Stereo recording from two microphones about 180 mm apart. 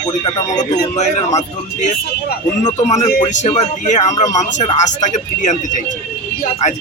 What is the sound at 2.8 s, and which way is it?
A man's voice, 40° left (ahead or behind).